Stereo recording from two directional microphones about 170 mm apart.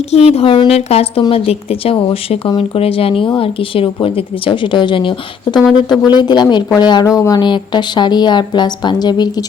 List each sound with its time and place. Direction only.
0.1 s speech: 40° left (ahead or behind)